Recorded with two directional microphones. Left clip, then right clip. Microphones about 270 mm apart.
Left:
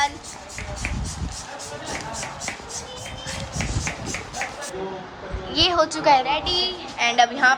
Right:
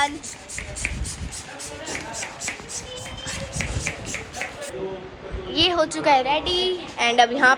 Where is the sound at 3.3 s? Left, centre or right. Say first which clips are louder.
Even; left.